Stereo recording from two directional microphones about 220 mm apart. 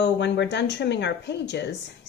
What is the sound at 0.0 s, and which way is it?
A woman's voice, 50° left (ahead or behind).